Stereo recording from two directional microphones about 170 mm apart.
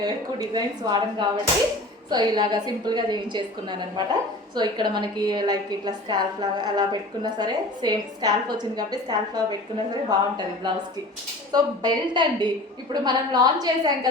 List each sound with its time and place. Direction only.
0.0 s a woman's voice: 25° right (ahead or behind)